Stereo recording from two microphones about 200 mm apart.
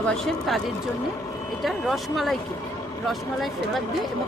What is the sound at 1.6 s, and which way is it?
Speech, centre (ahead or behind).